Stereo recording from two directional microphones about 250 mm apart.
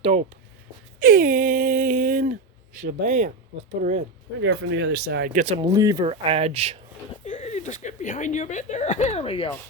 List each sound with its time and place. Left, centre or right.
0.9 s speech: right
4.4 s speech: right
5.5 s speech: centre
7.3 s speech: left